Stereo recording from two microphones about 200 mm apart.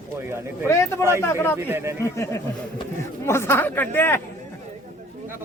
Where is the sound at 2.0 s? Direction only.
15° left (ahead or behind).